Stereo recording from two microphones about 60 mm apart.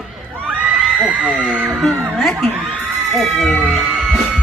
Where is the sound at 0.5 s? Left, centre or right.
Right.